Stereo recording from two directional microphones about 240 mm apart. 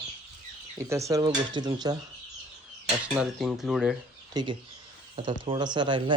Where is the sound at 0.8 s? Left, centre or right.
Centre.